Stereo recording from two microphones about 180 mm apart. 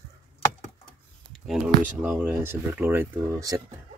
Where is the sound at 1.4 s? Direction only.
5° right (ahead or behind).